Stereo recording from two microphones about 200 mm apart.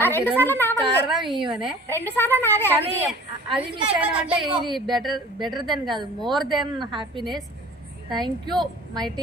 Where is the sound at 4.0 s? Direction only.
5° right (ahead or behind).